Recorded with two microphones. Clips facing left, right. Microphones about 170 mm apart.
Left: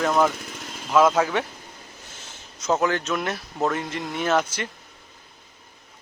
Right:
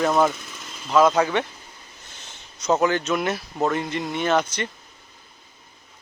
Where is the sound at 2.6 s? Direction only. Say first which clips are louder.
Right 2 dB; centre (ahead or behind).